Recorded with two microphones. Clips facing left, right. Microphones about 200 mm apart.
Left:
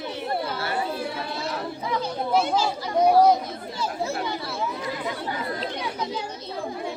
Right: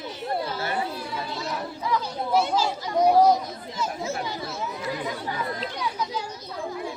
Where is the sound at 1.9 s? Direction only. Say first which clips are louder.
Even; 20° left (ahead or behind).